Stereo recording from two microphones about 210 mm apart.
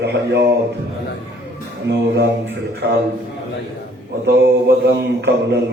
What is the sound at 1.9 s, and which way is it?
Mantra, 55° right (ahead or behind).